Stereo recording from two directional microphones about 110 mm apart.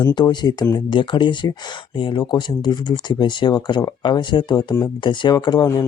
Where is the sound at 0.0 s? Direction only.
45° left (ahead or behind).